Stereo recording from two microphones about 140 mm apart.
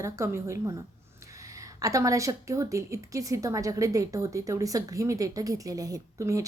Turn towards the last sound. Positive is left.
turn(degrees=-20)  # may be behind; listen again after turning